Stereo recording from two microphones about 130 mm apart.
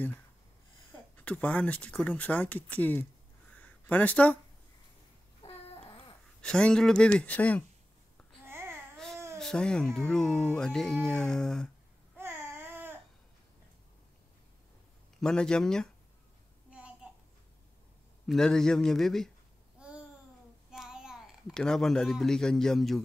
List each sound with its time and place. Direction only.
1.1 s speech: 10° left (ahead or behind)
3.5 s a sound: 10° left (ahead or behind)
5.4 s babbling: 45° left (ahead or behind)
6.4 s speech: 5° left (ahead or behind)
8.5 s babbling: 15° right (ahead or behind)
8.9 s baby cry: 5° left (ahead or behind)
9.4 s speech: 5° left (ahead or behind)
12.2 s babbling: 15° right (ahead or behind)
15.1 s speech: 5° left (ahead or behind)
16.7 s a sound: 10° right (ahead or behind)
18.2 s speech: 5° left (ahead or behind)
19.8 s babbling: 10° right (ahead or behind)
20.7 s a sound: 5° right (ahead or behind)
21.5 s speech: 5° left (ahead or behind)